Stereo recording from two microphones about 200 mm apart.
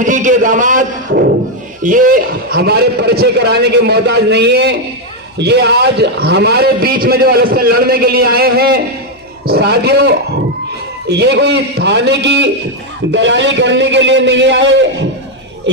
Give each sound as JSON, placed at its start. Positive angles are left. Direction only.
{"t": 0.0, "sound": "a man's voice", "side_deg": -40}